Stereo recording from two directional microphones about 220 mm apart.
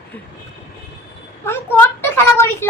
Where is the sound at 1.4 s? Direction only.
10° left (ahead or behind).